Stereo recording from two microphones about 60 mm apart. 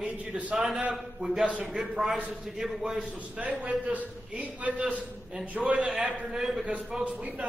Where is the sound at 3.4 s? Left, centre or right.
Right.